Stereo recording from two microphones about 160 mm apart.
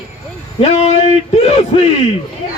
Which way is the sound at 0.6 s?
40° left (ahead or behind).